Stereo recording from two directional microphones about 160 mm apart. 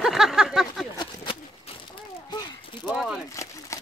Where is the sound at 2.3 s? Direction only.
25° left (ahead or behind).